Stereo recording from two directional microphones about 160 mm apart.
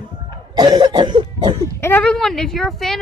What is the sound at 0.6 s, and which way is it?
Speech, 25° right (ahead or behind).